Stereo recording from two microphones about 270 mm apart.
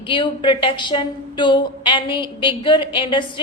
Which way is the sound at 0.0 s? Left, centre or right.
Centre.